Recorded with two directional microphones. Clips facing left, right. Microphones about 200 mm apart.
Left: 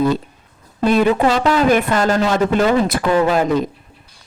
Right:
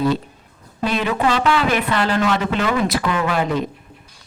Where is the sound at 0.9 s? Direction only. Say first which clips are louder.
Left 6 dB; 45° left (ahead or behind).